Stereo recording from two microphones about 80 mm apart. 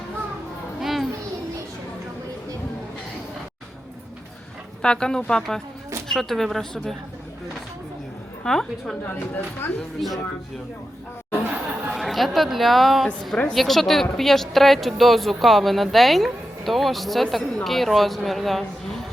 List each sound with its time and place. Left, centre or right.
0.8 s children playing: centre
4.8 s a woman's voice: centre
8.4 s a woman's voice: centre
11.3 s chatter: right
11.9 s a woman's voice: centre